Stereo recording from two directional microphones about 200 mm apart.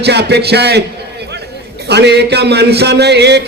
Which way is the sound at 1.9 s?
55° right (ahead or behind).